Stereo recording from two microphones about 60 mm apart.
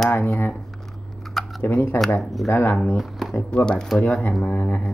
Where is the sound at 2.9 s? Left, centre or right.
Centre.